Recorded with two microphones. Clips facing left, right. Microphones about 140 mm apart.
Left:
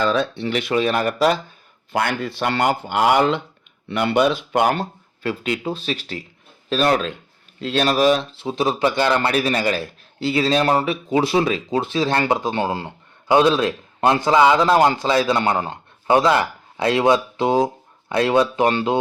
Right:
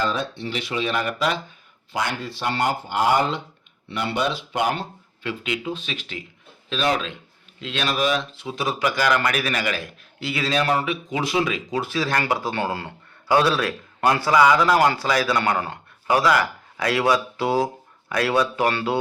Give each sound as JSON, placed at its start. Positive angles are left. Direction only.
{"t": 0.0, "sound": "speech", "side_deg": 75}
{"t": 1.9, "sound": "speech", "side_deg": 60}
{"t": 3.8, "sound": "speech", "side_deg": 60}